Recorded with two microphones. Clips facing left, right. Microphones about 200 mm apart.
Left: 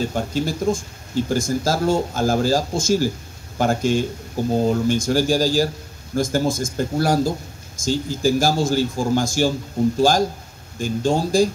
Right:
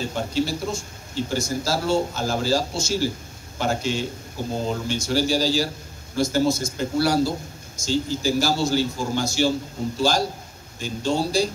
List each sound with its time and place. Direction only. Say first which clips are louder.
0.1 s speech: left 1 dB; 50° left (ahead or behind)